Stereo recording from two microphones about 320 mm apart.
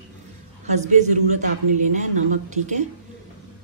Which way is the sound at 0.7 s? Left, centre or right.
Right.